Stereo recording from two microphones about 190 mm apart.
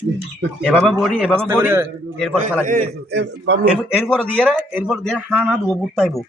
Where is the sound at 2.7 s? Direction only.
55° right (ahead or behind).